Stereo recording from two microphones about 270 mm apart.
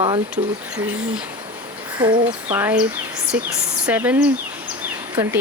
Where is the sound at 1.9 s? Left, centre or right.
Centre.